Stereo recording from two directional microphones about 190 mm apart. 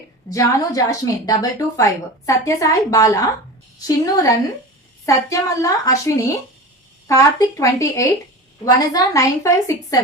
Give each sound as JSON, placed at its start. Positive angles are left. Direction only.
{"t": 0.3, "sound": "a woman's voice", "side_deg": 15}